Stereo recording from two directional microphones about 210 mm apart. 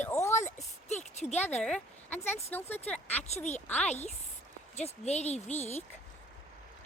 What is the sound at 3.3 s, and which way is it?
Speech, 35° left (ahead or behind).